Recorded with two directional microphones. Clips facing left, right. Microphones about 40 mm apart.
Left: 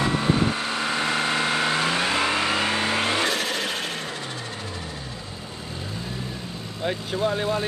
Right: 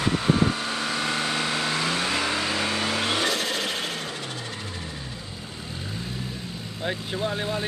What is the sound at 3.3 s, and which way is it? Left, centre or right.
Vehicle, left.